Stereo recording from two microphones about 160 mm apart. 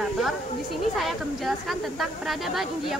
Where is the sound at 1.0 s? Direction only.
Centre (ahead or behind).